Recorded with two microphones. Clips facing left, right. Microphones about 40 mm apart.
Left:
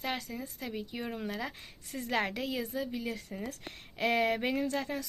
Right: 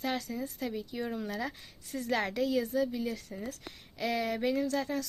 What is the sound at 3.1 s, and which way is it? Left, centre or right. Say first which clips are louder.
Speech: even; left.